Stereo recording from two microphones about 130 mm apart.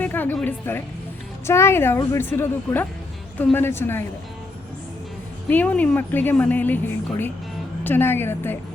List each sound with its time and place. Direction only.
0.0 s music: 15° left (ahead or behind)
0.4 s a woman's voice: 15° left (ahead or behind)
5.5 s a woman's voice: 10° left (ahead or behind)